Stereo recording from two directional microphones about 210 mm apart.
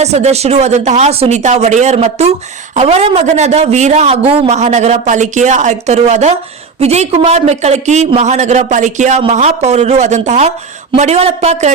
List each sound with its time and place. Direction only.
0.0 s a man's voice: 30° right (ahead or behind)